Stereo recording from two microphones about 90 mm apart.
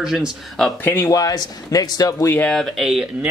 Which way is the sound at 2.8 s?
10° right (ahead or behind).